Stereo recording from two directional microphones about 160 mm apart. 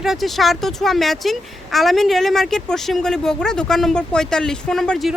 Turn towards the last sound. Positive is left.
turn(degrees=0)  # may be behind; listen again after turning